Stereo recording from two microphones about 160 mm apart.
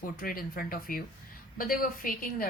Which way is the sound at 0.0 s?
65° left (ahead or behind).